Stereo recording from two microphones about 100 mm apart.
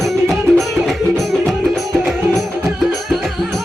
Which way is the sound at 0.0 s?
Centre (ahead or behind).